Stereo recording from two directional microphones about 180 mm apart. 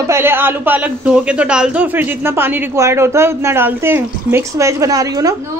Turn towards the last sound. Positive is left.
turn(degrees=-20)  # may be behind; listen again after turning